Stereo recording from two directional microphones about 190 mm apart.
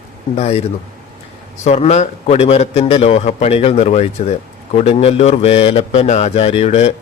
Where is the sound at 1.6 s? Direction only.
35° left (ahead or behind).